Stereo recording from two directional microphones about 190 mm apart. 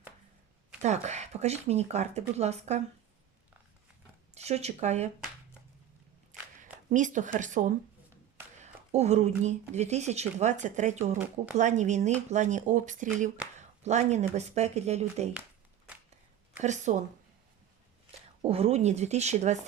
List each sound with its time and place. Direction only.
0.8 s speech: 35° right (ahead or behind)
4.4 s speech: 35° right (ahead or behind)
6.6 s a sound: 40° right (ahead or behind)
7.3 s speech: 40° right (ahead or behind)
16.6 s speech: 40° right (ahead or behind)
18.4 s speech: 30° right (ahead or behind)